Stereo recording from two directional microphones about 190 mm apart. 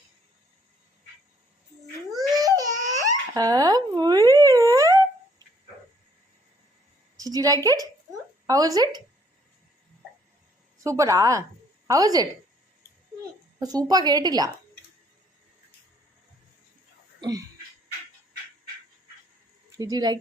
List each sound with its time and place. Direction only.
2.3 s babbling: 20° right (ahead or behind)
7.2 s a woman's voice: 20° right (ahead or behind)
10.8 s a woman's voice: 15° right (ahead or behind)
13.6 s a woman's voice: 20° right (ahead or behind)
17.2 s a sound: 20° right (ahead or behind)
19.7 s speech: 20° right (ahead or behind)